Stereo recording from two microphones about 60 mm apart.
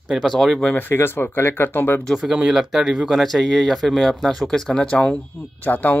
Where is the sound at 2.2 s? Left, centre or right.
Centre.